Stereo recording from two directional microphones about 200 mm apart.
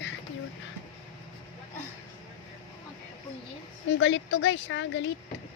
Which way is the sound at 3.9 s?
65° left (ahead or behind).